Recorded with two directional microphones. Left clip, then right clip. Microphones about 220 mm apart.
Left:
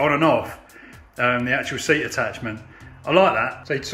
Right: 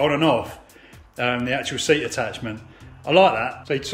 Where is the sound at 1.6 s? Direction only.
5° right (ahead or behind).